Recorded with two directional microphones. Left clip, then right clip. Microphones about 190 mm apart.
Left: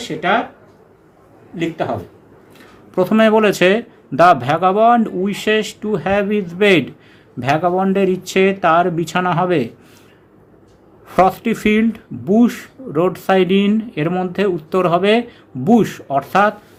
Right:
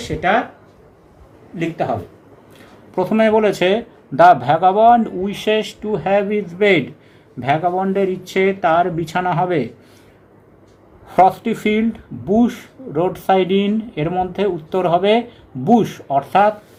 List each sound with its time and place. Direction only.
0.0 s speech: 5° right (ahead or behind)
1.5 s speech: centre (ahead or behind)
2.9 s speech: 20° left (ahead or behind)
11.1 s speech: 20° left (ahead or behind)